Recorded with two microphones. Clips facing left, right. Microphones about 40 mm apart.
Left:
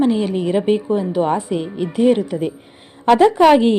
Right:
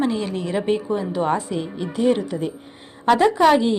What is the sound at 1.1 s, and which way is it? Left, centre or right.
Speech, centre.